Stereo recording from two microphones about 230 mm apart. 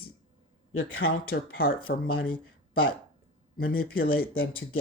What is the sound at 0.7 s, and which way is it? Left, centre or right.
Speech, left.